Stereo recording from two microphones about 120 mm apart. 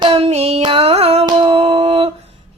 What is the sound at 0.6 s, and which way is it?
Child singing, 50° right (ahead or behind).